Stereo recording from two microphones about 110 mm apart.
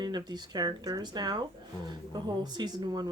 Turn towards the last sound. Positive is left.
turn(degrees=-40)  # may be behind; listen again after turning